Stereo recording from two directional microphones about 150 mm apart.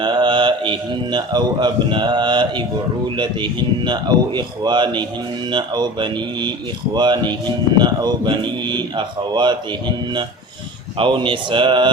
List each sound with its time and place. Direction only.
0.0 s mantra: 30° right (ahead or behind)
3.2 s speech: 30° right (ahead or behind)